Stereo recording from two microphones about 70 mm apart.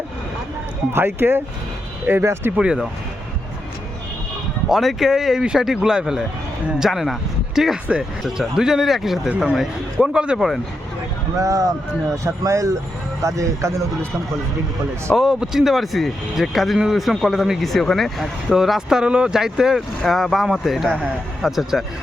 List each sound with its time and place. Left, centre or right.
0.9 s speech: right
2.6 s speech: centre
4.7 s speech: centre
11.3 s speech: right
15.1 s speech: centre